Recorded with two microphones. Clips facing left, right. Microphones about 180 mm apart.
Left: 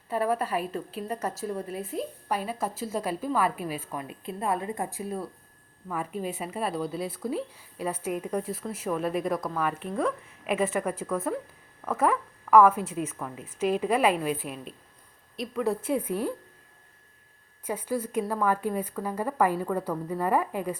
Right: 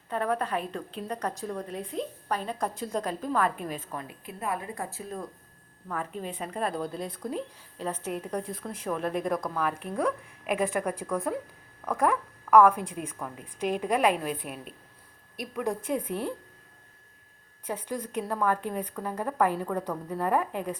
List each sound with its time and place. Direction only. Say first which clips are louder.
0.1 s a woman's voice: left 2 dB; 5° left (ahead or behind)
4.0 s a woman's voice: left 4 dB; 30° left (ahead or behind); by 14.7 s centre (ahead or behind)
15.8 s a woman's voice: left 2 dB; 5° left (ahead or behind)
17.7 s a woman's voice: left 3 dB; 10° left (ahead or behind)